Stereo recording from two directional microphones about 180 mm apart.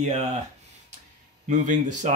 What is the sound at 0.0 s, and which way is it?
Speech, 40° right (ahead or behind).